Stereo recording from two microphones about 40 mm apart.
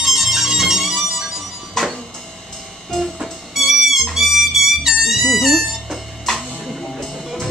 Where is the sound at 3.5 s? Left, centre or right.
Centre.